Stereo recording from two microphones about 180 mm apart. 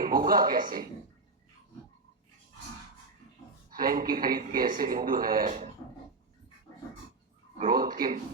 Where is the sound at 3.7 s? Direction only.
50° right (ahead or behind).